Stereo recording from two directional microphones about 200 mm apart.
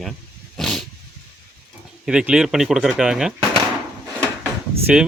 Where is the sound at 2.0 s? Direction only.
5° right (ahead or behind).